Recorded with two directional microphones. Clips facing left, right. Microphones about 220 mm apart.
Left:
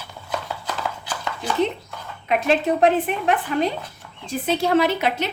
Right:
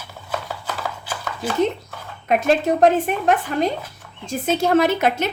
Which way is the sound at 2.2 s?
45° right (ahead or behind).